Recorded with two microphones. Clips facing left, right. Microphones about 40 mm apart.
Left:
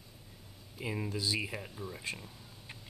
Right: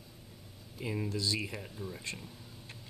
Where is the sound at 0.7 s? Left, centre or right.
Centre.